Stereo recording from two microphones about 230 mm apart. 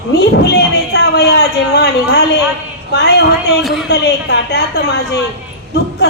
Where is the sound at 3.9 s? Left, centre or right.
Left.